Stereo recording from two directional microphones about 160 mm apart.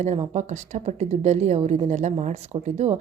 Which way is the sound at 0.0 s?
45° right (ahead or behind).